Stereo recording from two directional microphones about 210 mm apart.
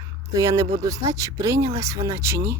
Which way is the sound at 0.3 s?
15° right (ahead or behind).